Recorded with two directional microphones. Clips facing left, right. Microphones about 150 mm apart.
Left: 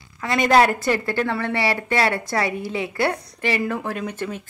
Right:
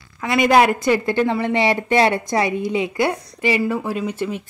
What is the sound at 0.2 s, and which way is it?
A woman's voice, 15° right (ahead or behind).